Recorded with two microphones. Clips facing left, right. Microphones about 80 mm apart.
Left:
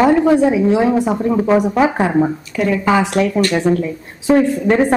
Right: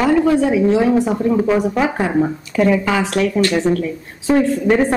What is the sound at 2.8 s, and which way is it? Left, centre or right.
A woman's voice, left.